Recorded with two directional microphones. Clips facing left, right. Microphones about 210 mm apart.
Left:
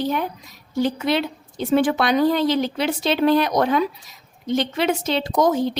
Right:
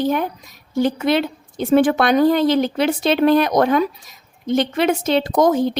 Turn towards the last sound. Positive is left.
turn(degrees=-50)  # may be behind; listen again after turning